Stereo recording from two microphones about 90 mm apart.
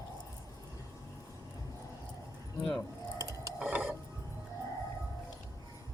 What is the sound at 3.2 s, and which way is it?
Gears, 35° right (ahead or behind).